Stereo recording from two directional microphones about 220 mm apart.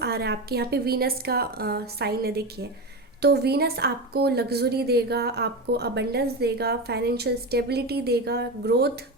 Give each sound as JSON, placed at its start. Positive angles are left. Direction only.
{"t": 0.0, "sound": "a woman's voice", "side_deg": -50}